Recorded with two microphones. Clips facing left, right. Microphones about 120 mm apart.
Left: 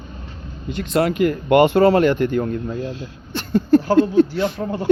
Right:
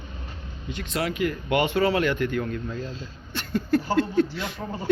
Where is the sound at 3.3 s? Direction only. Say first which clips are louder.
Left 9 dB; 30° left (ahead or behind).